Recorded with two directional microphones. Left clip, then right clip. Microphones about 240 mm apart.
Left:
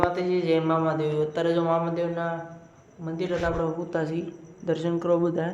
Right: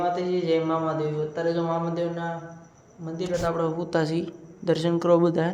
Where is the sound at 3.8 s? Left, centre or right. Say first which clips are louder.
Right 3 dB; centre.